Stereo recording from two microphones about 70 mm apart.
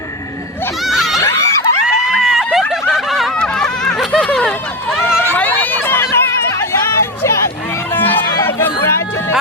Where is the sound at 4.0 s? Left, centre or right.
Centre.